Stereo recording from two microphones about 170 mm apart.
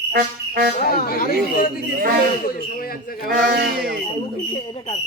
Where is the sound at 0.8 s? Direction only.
55° left (ahead or behind).